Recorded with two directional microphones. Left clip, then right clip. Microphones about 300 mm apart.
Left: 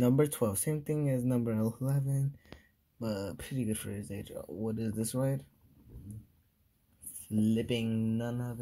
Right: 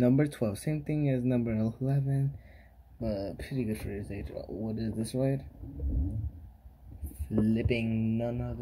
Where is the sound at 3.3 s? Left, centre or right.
Left.